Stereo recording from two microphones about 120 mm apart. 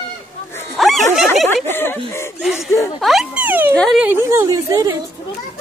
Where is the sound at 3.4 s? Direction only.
15° right (ahead or behind).